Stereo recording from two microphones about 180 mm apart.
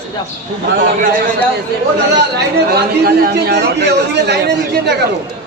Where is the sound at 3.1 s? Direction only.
60° right (ahead or behind).